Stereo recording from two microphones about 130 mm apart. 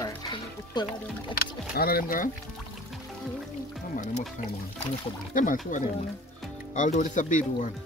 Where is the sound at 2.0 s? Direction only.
90° left.